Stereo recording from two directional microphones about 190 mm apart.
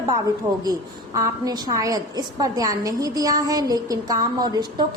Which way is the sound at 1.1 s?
20° right (ahead or behind).